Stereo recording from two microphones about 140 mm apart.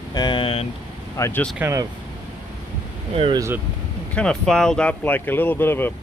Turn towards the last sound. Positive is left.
turn(degrees=15)  # may be behind; listen again after turning